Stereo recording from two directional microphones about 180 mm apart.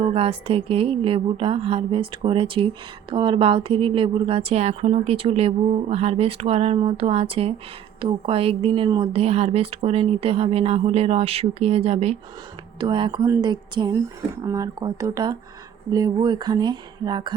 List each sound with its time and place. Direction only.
0.0 s a woman's voice: 30° right (ahead or behind)